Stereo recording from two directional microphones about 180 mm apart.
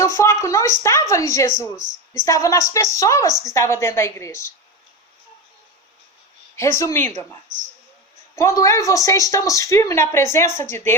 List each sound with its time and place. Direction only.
0.0 s speech: 15° left (ahead or behind)
6.6 s speech: 15° left (ahead or behind)
8.4 s speech: 15° left (ahead or behind)